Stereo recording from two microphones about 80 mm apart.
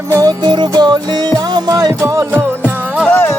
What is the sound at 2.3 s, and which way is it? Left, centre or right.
Music, right.